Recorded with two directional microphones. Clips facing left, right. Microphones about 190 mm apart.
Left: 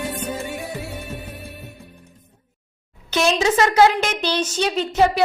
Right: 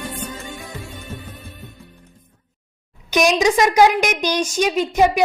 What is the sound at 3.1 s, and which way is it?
A woman's voice, 15° right (ahead or behind).